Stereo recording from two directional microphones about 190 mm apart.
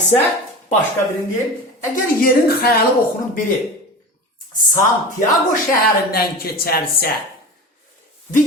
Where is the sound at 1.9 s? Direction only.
50° left (ahead or behind).